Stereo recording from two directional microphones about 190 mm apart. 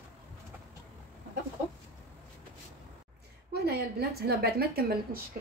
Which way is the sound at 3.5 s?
55° right (ahead or behind).